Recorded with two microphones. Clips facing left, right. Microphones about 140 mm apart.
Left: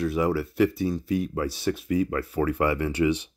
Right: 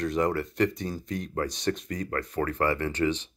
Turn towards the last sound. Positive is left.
turn(degrees=10)  # may be behind; listen again after turning